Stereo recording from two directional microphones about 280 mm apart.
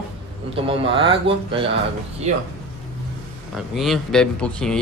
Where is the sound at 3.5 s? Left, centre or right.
Centre.